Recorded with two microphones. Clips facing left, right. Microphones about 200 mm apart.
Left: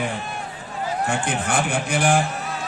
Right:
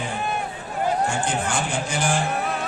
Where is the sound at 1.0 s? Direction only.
60° left (ahead or behind).